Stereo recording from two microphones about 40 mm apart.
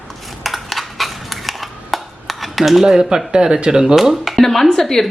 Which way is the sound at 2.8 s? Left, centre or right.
Centre.